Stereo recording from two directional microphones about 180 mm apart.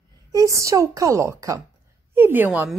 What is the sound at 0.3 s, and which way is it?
A child's voice, 20° right (ahead or behind).